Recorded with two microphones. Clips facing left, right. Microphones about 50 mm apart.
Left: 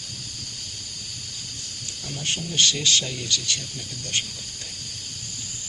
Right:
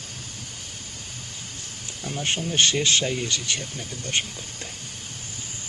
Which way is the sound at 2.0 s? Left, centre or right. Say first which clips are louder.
Right 3 dB; right.